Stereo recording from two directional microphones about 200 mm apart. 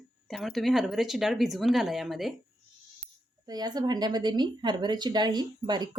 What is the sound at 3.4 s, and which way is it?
A woman's voice, 20° right (ahead or behind).